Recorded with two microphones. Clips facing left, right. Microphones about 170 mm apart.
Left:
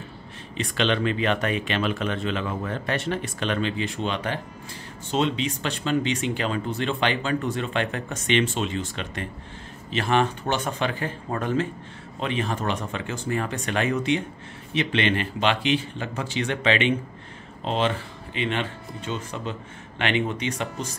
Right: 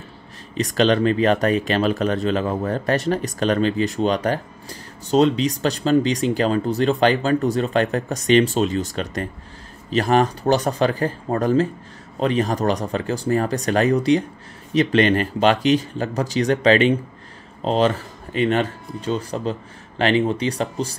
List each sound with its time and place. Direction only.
0.6 s speech: 40° right (ahead or behind)